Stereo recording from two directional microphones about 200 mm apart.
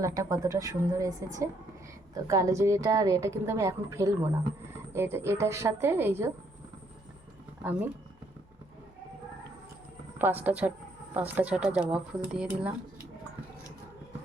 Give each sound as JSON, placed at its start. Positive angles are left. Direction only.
{"t": 0.0, "sound": "a woman's voice", "side_deg": -15}
{"t": 7.6, "sound": "speech", "side_deg": -10}
{"t": 10.2, "sound": "a woman's voice", "side_deg": -10}